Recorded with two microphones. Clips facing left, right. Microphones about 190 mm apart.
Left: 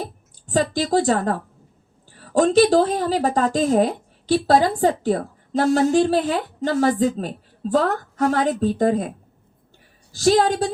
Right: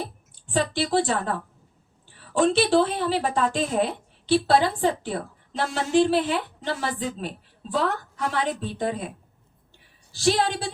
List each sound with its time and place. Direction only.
0.0 s a woman's voice: 45° left (ahead or behind)